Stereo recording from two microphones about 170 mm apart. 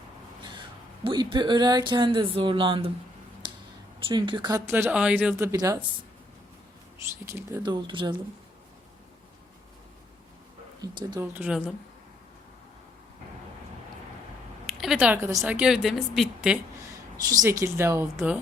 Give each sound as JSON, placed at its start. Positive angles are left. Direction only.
{"t": 1.0, "sound": "speech", "side_deg": -25}
{"t": 4.0, "sound": "speech", "side_deg": -25}
{"t": 5.5, "sound": "speech", "side_deg": -20}
{"t": 7.3, "sound": "speech", "side_deg": -15}
{"t": 10.9, "sound": "speech", "side_deg": -25}
{"t": 14.7, "sound": "speech", "side_deg": -5}
{"t": 17.2, "sound": "speech", "side_deg": -20}